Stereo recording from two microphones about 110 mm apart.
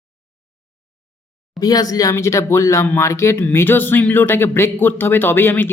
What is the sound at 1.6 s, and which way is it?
Speech, 35° left (ahead or behind).